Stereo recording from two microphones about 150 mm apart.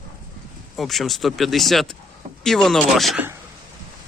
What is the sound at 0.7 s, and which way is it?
Speech, centre (ahead or behind).